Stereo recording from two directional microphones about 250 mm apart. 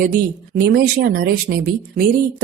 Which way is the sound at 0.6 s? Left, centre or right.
Right.